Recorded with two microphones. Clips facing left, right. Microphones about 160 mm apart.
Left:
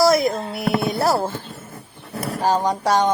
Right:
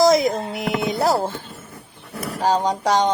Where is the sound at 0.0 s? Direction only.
20° right (ahead or behind).